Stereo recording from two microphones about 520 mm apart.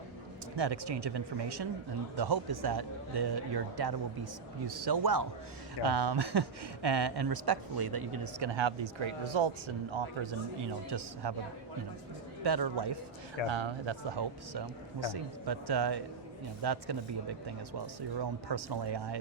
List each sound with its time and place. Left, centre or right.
0.5 s speech: right
8.5 s speech: right
10.8 s speech: right
12.4 s speech: right
13.5 s speech: right
18.2 s speech: right